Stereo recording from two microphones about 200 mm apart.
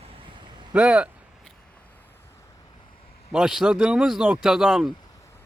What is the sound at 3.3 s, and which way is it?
Speech, 5° right (ahead or behind).